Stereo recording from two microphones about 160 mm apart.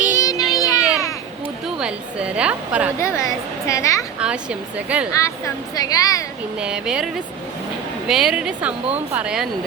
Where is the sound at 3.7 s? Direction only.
20° left (ahead or behind).